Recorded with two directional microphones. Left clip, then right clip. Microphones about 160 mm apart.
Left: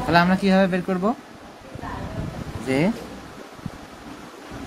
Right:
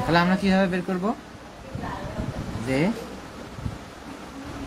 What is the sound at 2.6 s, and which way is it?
Speech, 60° left (ahead or behind).